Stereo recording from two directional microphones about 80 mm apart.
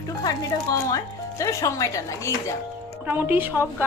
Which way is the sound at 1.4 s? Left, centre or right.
Left.